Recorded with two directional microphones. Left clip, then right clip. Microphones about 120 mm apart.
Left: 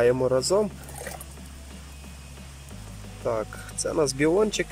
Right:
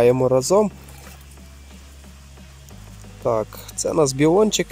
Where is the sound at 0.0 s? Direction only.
30° right (ahead or behind).